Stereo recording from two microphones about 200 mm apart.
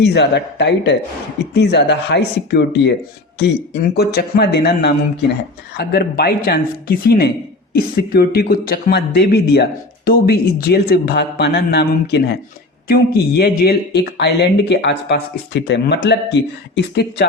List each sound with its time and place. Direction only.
0.0 s a woman's voice: 55° left (ahead or behind)